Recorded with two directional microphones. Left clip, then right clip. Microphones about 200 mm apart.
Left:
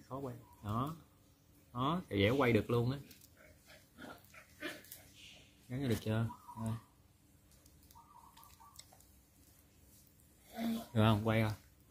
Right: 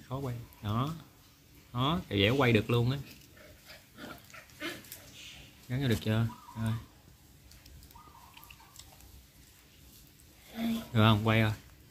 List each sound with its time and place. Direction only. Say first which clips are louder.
0.1 s speech: right 5 dB; centre (ahead or behind)
5.7 s speech: right 5 dB; centre (ahead or behind)
10.5 s speech: right 5 dB; 5° left (ahead or behind)